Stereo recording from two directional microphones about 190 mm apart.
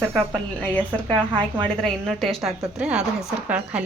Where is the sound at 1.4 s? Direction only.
25° right (ahead or behind).